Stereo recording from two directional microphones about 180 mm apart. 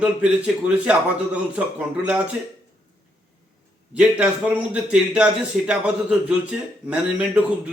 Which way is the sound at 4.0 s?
5° right (ahead or behind).